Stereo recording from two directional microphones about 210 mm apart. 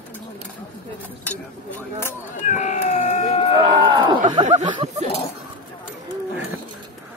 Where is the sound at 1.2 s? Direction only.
10° left (ahead or behind).